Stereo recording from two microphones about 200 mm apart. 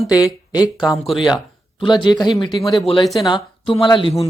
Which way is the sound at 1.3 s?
20° left (ahead or behind).